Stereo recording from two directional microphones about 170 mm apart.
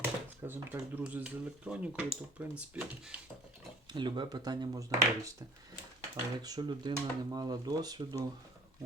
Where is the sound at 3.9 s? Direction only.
25° right (ahead or behind).